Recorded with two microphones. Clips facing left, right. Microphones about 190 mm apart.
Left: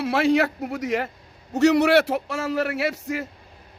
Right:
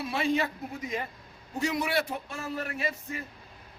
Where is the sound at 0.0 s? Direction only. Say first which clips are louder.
Left 8 dB; 80° left.